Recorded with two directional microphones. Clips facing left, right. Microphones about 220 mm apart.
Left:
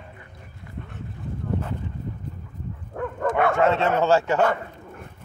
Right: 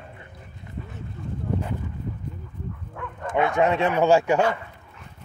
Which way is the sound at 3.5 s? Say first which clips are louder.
Even; 15° right (ahead or behind).